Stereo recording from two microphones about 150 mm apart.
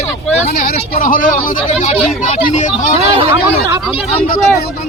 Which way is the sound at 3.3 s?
20° right (ahead or behind).